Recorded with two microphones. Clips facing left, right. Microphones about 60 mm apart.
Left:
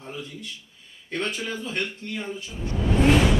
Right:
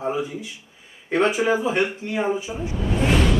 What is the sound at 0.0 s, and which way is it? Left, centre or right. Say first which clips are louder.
Speech: right 11 dB; centre.